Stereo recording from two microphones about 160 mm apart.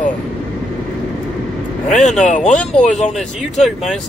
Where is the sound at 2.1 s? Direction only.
50° left (ahead or behind).